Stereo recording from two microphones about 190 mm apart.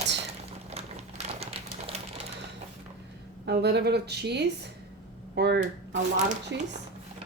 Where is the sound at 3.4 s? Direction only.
60° right (ahead or behind).